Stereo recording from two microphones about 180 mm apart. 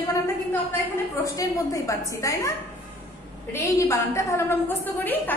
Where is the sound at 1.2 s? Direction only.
20° left (ahead or behind).